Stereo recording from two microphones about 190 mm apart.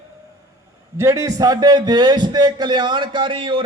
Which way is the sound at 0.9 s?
15° right (ahead or behind).